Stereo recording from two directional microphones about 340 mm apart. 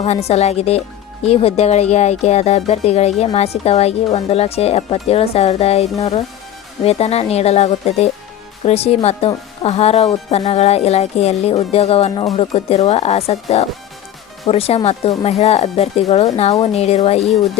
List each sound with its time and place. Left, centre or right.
0.0 s speech: centre